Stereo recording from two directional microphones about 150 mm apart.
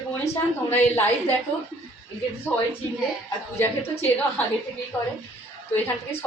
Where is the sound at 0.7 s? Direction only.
15° left (ahead or behind).